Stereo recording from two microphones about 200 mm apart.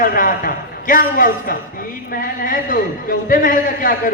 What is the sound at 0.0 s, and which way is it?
A man's voice, 45° left (ahead or behind).